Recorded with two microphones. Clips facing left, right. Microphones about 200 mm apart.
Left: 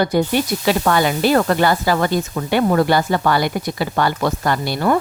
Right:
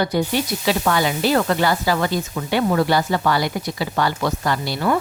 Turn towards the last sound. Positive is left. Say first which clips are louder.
# left 3 dB
turn(degrees=50)  # may be behind; listen again after turning